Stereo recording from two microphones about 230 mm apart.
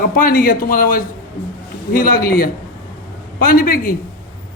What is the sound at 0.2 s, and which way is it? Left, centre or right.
A man's voice, left.